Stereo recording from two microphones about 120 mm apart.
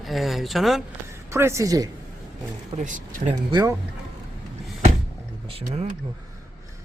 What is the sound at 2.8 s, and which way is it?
Speech, 90° right.